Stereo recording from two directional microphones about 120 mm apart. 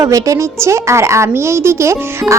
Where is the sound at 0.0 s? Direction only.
25° right (ahead or behind).